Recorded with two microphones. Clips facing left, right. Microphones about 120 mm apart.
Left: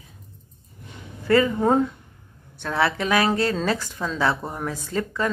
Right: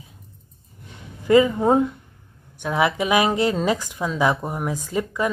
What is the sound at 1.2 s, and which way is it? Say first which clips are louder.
Speech: right 3 dB; 15° right (ahead or behind).